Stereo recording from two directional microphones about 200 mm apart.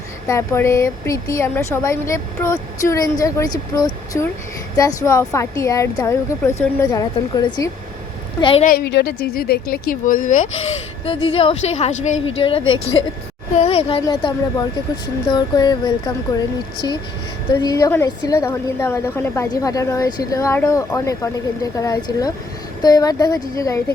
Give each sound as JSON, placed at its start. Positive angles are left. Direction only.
{"t": 0.3, "sound": "a woman's voice", "side_deg": 15}
{"t": 8.6, "sound": "speech", "side_deg": 50}
{"t": 11.0, "sound": "a woman's voice", "side_deg": 30}
{"t": 17.5, "sound": "a woman's voice", "side_deg": 20}